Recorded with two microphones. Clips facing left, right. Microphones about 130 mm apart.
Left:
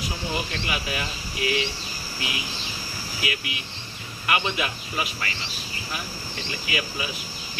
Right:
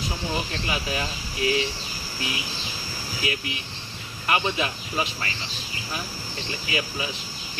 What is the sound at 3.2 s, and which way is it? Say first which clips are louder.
Speech: right 2 dB; 35° right (ahead or behind).